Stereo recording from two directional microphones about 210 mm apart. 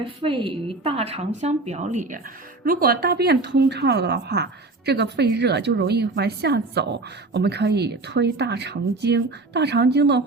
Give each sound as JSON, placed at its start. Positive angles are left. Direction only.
{"t": 0.0, "sound": "a woman's voice", "side_deg": -25}